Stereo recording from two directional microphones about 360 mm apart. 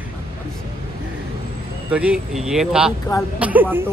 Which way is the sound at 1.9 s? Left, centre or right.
Centre.